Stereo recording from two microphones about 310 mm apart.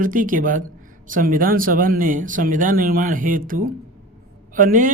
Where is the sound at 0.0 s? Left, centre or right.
Right.